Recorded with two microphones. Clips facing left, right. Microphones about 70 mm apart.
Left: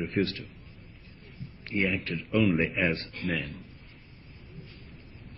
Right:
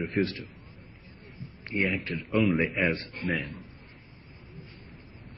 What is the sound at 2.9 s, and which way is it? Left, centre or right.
Speech, right.